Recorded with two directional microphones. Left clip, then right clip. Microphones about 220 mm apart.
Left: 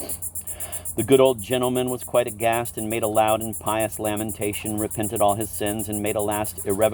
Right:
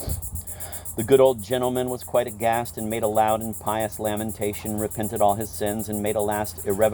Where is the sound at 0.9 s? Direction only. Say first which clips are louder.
Even; 50° left (ahead or behind).